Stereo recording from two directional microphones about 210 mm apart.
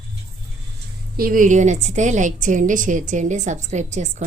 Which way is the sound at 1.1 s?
40° right (ahead or behind).